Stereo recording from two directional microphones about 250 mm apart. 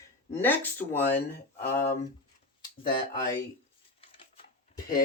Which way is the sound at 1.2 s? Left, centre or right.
Left.